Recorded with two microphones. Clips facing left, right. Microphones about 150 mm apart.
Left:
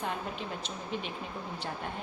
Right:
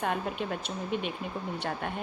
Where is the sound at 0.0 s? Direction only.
60° right (ahead or behind).